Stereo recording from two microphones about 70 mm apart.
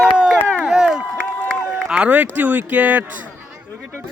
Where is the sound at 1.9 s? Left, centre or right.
Centre.